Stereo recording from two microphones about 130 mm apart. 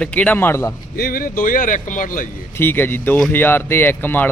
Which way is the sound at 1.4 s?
90° left.